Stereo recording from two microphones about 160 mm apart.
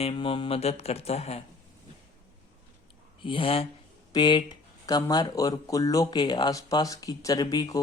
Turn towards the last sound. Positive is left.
turn(degrees=25)  # may be behind; listen again after turning